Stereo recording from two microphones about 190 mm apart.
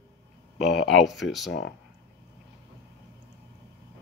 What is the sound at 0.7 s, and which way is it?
Speech, centre (ahead or behind).